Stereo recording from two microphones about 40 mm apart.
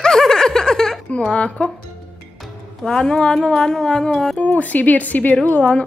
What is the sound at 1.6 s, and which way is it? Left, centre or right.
Speech, centre.